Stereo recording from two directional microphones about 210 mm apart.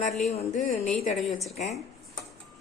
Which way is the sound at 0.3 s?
30° left (ahead or behind).